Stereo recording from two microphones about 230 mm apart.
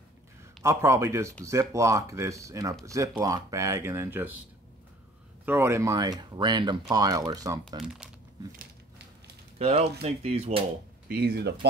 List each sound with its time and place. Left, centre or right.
0.7 s speech: centre
5.4 s speech: centre
7.7 s speech: centre
9.6 s speech: right
11.1 s speech: right